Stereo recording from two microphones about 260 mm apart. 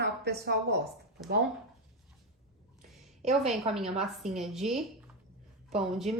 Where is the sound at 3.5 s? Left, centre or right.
Centre.